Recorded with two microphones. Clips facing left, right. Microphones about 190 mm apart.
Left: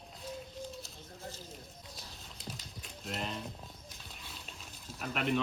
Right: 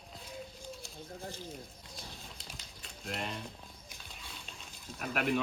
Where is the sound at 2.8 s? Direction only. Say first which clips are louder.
Right 1 dB; centre (ahead or behind).